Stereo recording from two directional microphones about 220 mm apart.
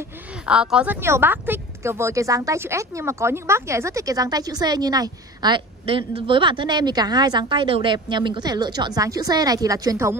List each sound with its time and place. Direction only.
0.5 s speech: 5° right (ahead or behind)